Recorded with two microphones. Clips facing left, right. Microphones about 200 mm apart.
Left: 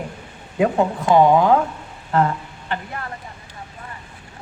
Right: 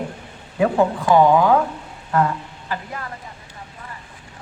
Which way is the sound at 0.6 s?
25° left (ahead or behind).